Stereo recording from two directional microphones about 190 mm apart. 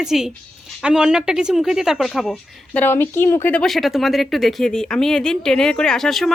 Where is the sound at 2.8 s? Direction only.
10° left (ahead or behind).